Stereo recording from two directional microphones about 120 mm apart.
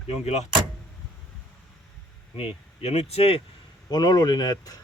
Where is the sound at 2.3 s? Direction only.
50° left (ahead or behind).